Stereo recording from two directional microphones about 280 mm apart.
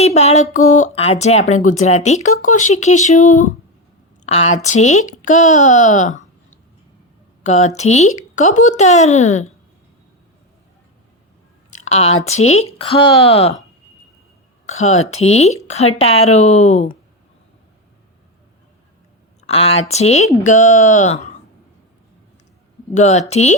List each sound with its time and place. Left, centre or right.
0.0 s a woman's voice: left
7.9 s speech: left
8.4 s speech: left
11.9 s speech: left
15.2 s speech: left
19.5 s speech: left
23.0 s speech: left